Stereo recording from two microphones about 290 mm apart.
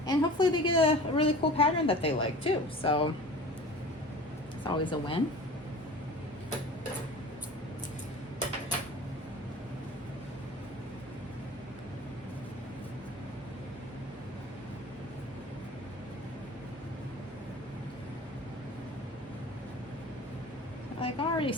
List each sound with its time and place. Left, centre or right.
0.0 s a woman's voice: centre
4.6 s a woman's voice: centre
21.0 s a sound: centre